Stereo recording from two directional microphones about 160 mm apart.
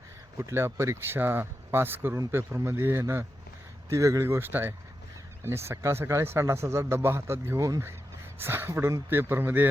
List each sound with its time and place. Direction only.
0.3 s speech: 15° right (ahead or behind)